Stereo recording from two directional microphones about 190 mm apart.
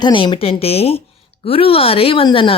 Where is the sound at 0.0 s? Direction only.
25° left (ahead or behind).